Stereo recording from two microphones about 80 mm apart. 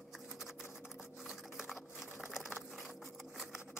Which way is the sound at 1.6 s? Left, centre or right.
Centre.